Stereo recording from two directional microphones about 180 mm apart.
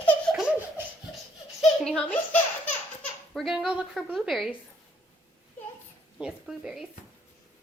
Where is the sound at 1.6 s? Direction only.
5° left (ahead or behind).